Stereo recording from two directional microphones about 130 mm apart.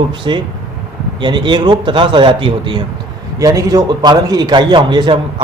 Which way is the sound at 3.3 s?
25° right (ahead or behind).